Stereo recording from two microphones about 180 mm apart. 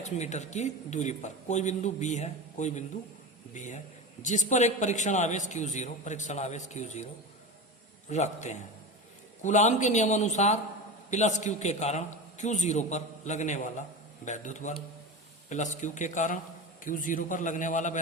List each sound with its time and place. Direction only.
0.0 s a man's voice: 40° left (ahead or behind)
8.1 s a man's voice: 40° left (ahead or behind)